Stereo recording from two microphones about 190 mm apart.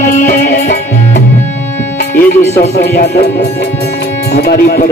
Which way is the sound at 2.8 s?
60° left (ahead or behind).